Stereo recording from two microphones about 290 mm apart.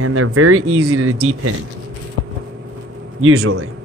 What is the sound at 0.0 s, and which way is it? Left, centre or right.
Speech, right.